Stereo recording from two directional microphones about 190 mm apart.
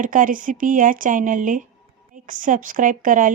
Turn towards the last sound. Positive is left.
turn(degrees=-45)  # may be behind; listen again after turning